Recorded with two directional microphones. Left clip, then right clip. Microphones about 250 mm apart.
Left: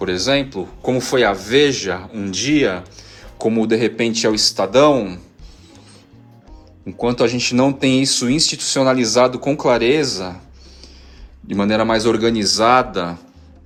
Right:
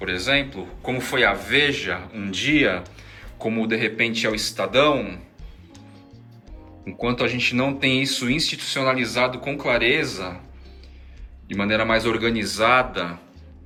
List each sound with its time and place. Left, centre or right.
0.9 s speech: centre
6.8 s speech: centre
11.4 s speech: centre